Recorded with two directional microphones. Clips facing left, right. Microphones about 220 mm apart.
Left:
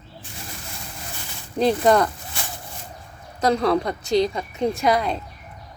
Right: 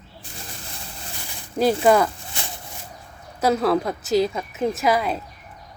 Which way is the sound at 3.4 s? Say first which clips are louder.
Even; 5° right (ahead or behind).